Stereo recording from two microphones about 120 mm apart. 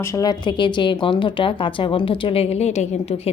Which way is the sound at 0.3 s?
40° left (ahead or behind).